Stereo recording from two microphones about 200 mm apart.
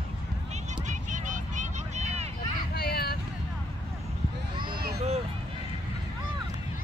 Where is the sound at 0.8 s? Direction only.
40° right (ahead or behind).